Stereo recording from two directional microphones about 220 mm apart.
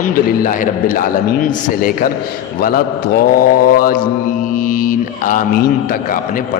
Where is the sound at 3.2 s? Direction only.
40° left (ahead or behind).